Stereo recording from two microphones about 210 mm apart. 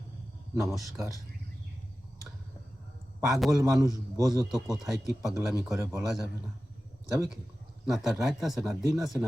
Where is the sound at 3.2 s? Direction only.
Centre (ahead or behind).